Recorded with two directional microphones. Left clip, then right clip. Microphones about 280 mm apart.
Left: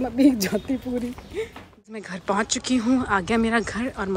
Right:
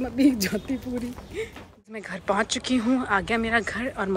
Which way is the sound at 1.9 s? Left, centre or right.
Centre.